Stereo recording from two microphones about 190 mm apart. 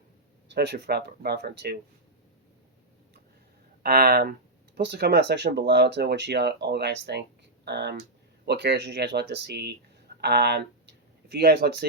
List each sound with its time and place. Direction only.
0.4 s speech: 60° right (ahead or behind)
3.8 s speech: 55° right (ahead or behind)